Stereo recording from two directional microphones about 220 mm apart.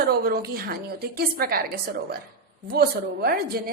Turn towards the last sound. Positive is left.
turn(degrees=-45)  # may be behind; listen again after turning